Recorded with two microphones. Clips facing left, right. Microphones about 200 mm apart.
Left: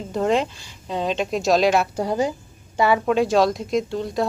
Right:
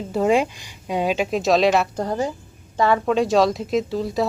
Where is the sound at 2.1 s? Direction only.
15° left (ahead or behind).